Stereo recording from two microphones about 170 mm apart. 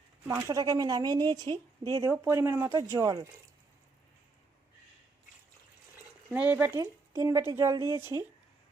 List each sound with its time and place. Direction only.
0.3 s speech: 20° right (ahead or behind)
2.0 s speech: 15° right (ahead or behind)
6.3 s speech: 10° right (ahead or behind)